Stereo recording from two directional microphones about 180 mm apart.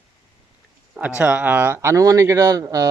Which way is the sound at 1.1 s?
10° right (ahead or behind).